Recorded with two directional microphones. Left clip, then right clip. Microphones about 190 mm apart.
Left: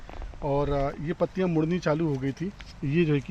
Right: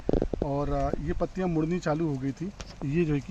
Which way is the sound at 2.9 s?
55° left (ahead or behind).